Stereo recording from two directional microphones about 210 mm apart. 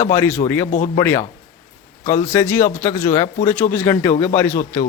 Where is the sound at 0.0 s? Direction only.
10° left (ahead or behind).